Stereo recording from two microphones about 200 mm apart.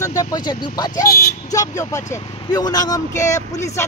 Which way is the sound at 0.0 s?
15° left (ahead or behind).